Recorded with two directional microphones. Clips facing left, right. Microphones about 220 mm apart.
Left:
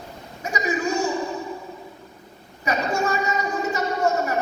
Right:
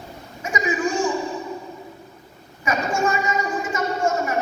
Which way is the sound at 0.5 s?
40° left (ahead or behind).